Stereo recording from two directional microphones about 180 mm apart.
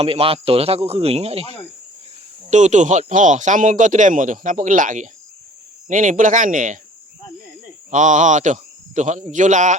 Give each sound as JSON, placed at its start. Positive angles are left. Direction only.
{"t": 0.0, "sound": "speech", "side_deg": -30}
{"t": 7.9, "sound": "speech", "side_deg": -45}